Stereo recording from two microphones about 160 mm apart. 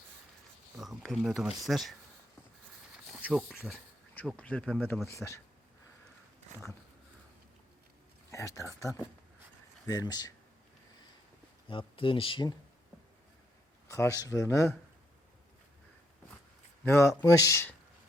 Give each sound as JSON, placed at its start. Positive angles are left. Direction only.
{"t": 0.8, "sound": "speech", "side_deg": 0}
{"t": 3.6, "sound": "speech", "side_deg": 10}
{"t": 8.3, "sound": "speech", "side_deg": 20}
{"t": 11.7, "sound": "speech", "side_deg": 30}
{"t": 13.8, "sound": "speech", "side_deg": 20}
{"t": 16.8, "sound": "speech", "side_deg": 15}